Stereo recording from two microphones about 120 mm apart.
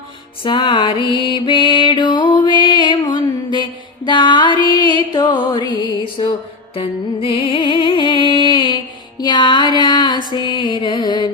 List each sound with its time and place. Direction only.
0.4 s music: 40° left (ahead or behind)